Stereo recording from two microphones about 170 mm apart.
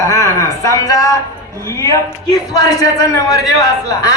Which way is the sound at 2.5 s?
20° left (ahead or behind).